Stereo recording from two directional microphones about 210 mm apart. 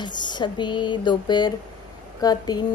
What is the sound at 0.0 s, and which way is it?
A woman's voice, 20° left (ahead or behind).